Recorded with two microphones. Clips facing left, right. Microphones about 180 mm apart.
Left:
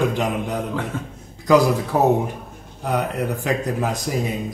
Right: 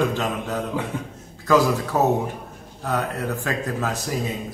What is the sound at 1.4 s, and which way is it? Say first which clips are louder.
Speech: left 3 dB; 15° left (ahead or behind).